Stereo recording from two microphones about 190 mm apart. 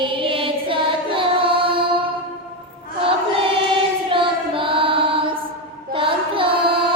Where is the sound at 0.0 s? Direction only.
25° right (ahead or behind).